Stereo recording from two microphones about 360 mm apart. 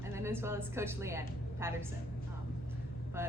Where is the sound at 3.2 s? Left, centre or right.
Centre.